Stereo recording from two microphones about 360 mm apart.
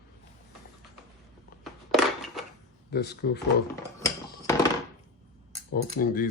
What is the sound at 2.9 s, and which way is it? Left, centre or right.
Cutlery, left.